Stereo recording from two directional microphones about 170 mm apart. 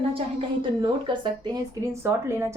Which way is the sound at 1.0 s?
30° right (ahead or behind).